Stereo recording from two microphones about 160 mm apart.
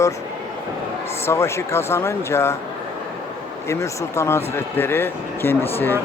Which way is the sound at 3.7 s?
15° left (ahead or behind).